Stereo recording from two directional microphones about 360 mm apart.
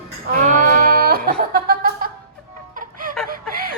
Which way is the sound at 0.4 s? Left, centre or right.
Right.